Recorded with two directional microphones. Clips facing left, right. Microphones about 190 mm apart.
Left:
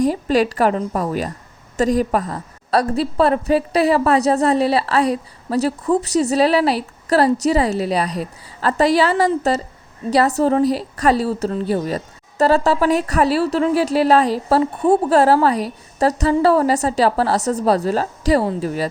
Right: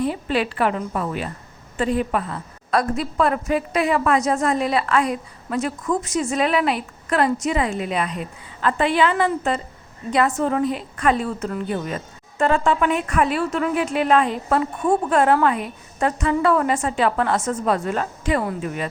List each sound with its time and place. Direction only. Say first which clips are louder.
0.0 s a woman's voice: left 6 dB; 40° left (ahead or behind)